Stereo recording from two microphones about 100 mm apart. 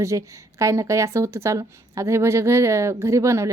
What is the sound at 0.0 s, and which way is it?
A woman's voice, 30° right (ahead or behind).